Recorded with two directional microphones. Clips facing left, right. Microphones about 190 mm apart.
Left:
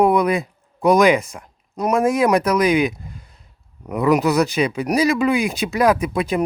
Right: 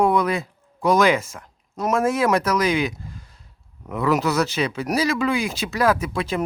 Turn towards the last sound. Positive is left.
turn(degrees=15)  # may be behind; listen again after turning